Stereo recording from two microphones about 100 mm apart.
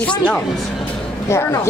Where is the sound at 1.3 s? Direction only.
30° left (ahead or behind).